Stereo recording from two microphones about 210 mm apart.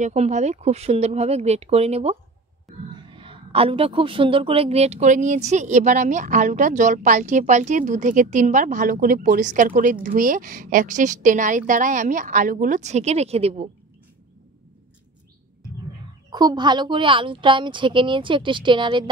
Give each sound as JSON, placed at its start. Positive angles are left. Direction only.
{"t": 0.0, "sound": "a woman's voice", "side_deg": -35}
{"t": 16.3, "sound": "a woman's voice", "side_deg": -20}